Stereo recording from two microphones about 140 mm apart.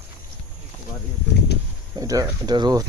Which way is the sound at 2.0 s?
25° right (ahead or behind).